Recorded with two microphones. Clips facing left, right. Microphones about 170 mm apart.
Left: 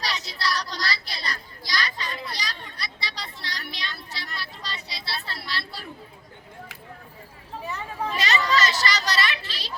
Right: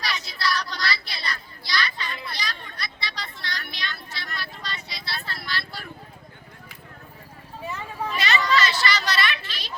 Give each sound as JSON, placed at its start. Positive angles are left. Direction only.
{"t": 0.0, "sound": "children playing", "side_deg": 35}
{"t": 3.0, "sound": "vehicle", "side_deg": 35}
{"t": 8.2, "sound": "children playing", "side_deg": 40}